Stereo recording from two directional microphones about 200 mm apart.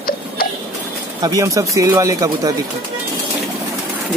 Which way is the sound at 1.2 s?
15° right (ahead or behind).